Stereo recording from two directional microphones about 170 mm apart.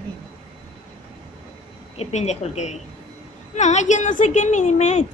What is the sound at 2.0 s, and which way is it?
A woman's voice, 40° left (ahead or behind).